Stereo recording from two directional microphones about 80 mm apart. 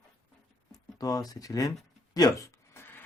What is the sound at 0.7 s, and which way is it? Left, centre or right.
Speech, left.